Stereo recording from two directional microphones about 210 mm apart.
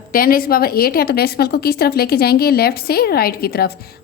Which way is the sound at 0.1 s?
45° left (ahead or behind).